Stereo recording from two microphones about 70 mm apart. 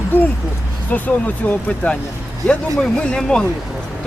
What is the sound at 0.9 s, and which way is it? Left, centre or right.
Speech, left.